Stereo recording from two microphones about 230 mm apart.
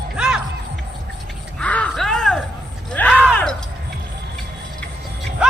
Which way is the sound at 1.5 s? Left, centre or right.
Centre.